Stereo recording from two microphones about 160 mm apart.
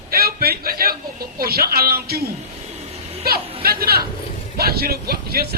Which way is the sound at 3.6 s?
70° right (ahead or behind).